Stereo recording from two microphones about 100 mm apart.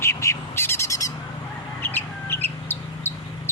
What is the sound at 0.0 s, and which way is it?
Bird, 30° left (ahead or behind).